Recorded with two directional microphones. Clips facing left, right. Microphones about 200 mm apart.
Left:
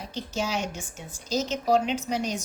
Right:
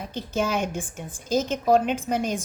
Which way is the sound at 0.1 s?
55° right (ahead or behind).